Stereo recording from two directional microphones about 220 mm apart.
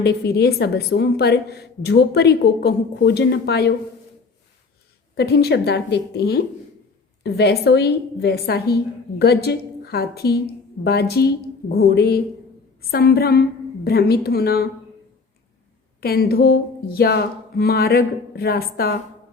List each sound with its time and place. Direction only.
0.0 s a woman's voice: 45° left (ahead or behind)
5.1 s a woman's voice: 45° left (ahead or behind)
16.0 s a woman's voice: 45° left (ahead or behind)